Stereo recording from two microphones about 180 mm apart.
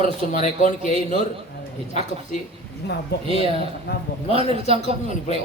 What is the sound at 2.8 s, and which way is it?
A man's voice, 65° left (ahead or behind).